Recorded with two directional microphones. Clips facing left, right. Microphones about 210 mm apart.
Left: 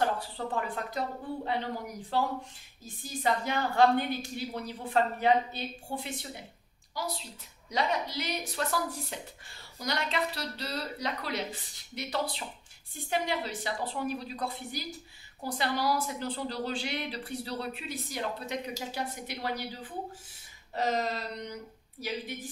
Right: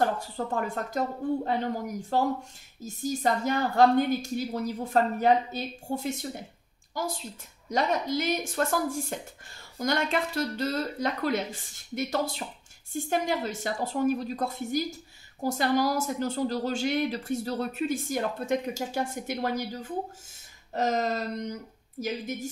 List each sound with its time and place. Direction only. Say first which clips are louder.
0.0 s a woman's voice: right 3 dB; 45° right (ahead or behind)